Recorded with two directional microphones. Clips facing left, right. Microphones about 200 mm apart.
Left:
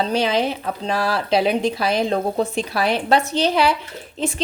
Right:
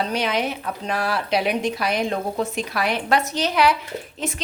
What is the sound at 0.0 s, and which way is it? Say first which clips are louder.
A woman's voice: left 4 dB; 30° left (ahead or behind).